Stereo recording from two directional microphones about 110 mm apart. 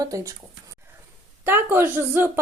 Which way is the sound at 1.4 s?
20° right (ahead or behind).